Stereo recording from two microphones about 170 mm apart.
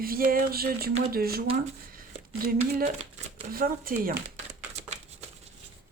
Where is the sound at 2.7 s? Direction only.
50° right (ahead or behind).